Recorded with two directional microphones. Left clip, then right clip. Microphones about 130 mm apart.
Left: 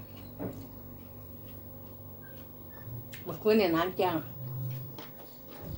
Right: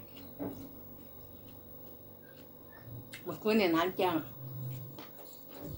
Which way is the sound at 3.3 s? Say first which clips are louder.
Left 4 dB; 15° right (ahead or behind).